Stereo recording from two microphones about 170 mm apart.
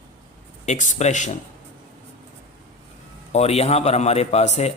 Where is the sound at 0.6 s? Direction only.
45° left (ahead or behind).